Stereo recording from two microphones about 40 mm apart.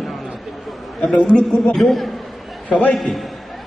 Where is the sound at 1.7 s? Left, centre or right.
Centre.